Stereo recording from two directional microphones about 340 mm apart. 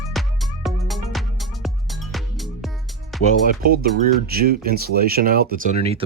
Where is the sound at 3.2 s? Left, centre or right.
Right.